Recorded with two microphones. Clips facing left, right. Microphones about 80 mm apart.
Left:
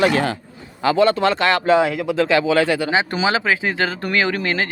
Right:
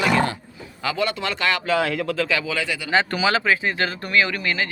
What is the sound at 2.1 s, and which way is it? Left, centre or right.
Speech, left.